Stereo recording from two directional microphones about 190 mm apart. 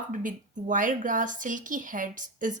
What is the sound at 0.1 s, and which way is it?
Speech, 45° right (ahead or behind).